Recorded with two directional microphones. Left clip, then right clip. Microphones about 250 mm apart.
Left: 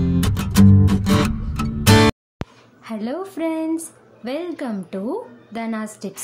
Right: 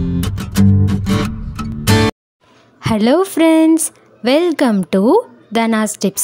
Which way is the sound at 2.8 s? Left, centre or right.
Right.